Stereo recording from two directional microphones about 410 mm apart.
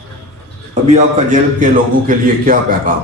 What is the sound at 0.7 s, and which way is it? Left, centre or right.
A man's voice, centre.